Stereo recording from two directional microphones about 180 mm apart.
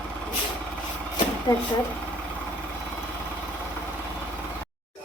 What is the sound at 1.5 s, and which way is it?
Speech, 25° left (ahead or behind).